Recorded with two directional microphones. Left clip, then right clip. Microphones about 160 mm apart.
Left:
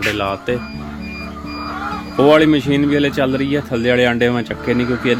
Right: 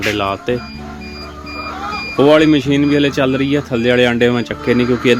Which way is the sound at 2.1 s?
Centre (ahead or behind).